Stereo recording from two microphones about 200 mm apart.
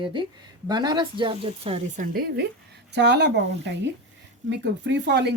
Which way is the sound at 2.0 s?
50° right (ahead or behind).